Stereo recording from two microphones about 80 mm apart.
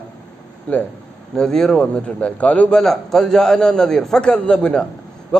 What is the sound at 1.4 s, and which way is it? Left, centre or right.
A man's voice, centre.